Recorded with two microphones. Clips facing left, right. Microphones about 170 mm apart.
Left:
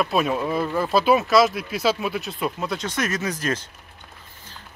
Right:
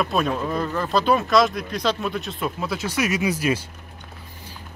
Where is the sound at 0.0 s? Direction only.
5° left (ahead or behind).